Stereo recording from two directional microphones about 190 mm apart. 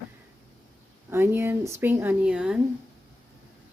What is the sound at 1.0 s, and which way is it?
Speech, 10° right (ahead or behind).